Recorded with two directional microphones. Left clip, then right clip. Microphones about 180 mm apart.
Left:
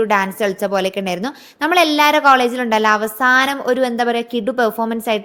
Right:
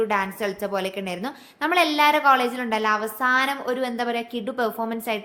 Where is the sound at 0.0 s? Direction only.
40° left (ahead or behind).